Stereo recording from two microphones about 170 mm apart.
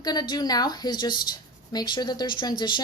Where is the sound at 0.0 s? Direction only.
25° left (ahead or behind).